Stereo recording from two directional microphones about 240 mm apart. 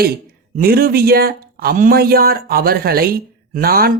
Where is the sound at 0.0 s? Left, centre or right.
Right.